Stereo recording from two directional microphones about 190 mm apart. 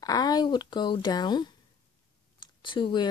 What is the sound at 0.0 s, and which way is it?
Speech, 20° left (ahead or behind).